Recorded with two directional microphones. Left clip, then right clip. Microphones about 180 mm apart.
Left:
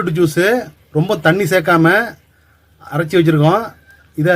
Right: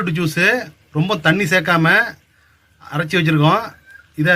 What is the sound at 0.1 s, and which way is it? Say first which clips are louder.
Speech: left 2 dB; 55° left (ahead or behind).